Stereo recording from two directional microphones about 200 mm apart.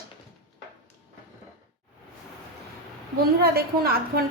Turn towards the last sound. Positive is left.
turn(degrees=-50)  # may be behind; listen again after turning